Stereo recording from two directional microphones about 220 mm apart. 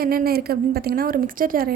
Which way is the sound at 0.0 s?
45° right (ahead or behind).